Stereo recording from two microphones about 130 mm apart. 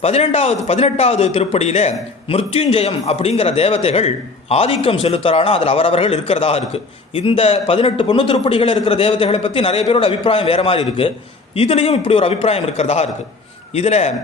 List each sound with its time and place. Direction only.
0.0 s a man's voice: 55° left (ahead or behind)